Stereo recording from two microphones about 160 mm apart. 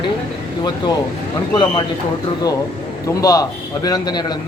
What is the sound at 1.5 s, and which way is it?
Speech, 25° left (ahead or behind).